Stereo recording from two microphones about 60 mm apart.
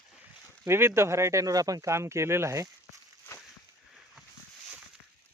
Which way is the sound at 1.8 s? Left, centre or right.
Right.